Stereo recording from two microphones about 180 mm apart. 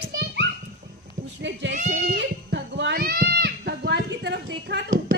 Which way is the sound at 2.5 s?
70° right (ahead or behind).